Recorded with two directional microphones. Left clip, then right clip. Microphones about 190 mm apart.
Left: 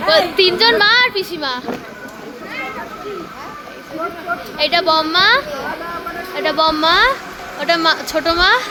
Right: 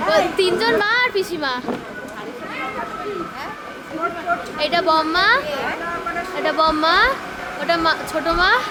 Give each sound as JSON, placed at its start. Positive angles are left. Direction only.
{"t": 0.1, "sound": "a child's voice", "side_deg": 20}
{"t": 1.1, "sound": "a woman's voice", "side_deg": 0}
{"t": 4.5, "sound": "a child's voice", "side_deg": 25}